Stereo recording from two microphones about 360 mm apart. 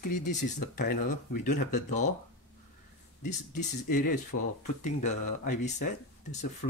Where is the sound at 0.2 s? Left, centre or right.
Centre.